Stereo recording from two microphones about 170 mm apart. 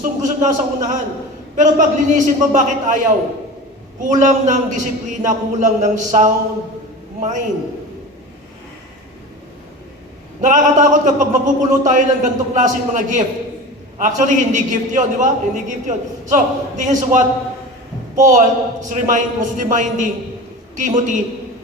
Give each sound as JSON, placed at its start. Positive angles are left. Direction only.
{"t": 0.0, "sound": "a man's voice", "side_deg": -50}
{"t": 10.4, "sound": "a man's voice", "side_deg": -50}
{"t": 18.2, "sound": "a man's voice", "side_deg": -45}